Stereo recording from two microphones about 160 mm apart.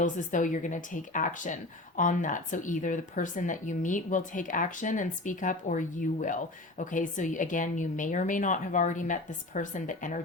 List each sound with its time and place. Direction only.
0.0 s speech: 50° left (ahead or behind)